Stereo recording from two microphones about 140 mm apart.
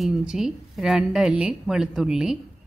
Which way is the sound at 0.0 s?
5° right (ahead or behind).